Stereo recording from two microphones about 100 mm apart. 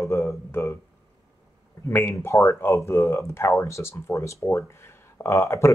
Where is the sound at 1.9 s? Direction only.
25° left (ahead or behind).